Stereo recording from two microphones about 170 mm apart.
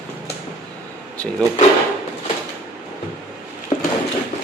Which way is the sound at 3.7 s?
40° left (ahead or behind).